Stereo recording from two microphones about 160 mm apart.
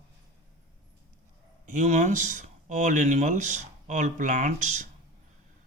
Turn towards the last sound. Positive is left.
turn(degrees=-50)  # may be behind; listen again after turning